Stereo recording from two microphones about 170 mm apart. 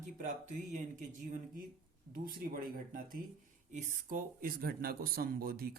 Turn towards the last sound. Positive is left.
turn(degrees=-60)  # may be behind; listen again after turning